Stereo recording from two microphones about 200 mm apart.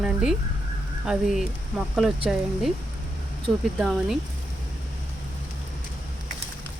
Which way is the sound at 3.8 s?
Centre (ahead or behind).